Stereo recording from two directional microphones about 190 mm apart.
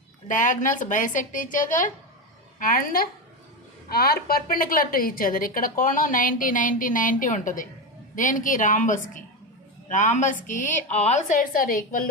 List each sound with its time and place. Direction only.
0.3 s a woman's voice: 45° left (ahead or behind)